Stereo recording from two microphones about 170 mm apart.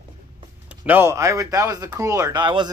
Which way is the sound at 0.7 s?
10° right (ahead or behind).